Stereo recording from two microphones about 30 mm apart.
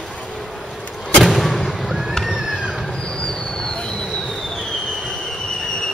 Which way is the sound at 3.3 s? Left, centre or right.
Left.